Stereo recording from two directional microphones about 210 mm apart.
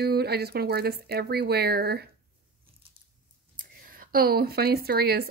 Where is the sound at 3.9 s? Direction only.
45° right (ahead or behind).